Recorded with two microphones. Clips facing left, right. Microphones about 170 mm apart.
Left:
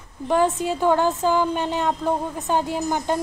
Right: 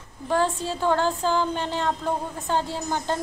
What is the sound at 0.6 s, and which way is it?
Speech, 15° left (ahead or behind).